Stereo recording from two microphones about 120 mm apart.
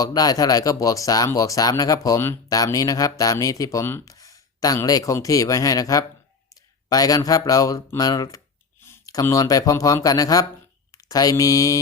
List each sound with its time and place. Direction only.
0.0 s speech: 30° left (ahead or behind)